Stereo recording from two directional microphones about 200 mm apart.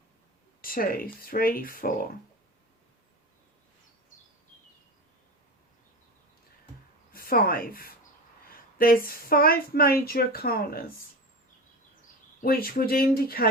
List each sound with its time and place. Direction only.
0.6 s a woman's voice: 45° left (ahead or behind)
7.1 s speech: 45° left (ahead or behind)
8.4 s a sound: 45° left (ahead or behind)
9.0 s a woman's voice: 50° left (ahead or behind)
12.4 s a woman's voice: 50° left (ahead or behind)